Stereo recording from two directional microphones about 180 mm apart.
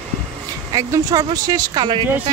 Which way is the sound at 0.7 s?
20° right (ahead or behind).